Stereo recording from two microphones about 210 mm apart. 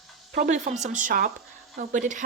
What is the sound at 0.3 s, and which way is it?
Speech, 40° right (ahead or behind).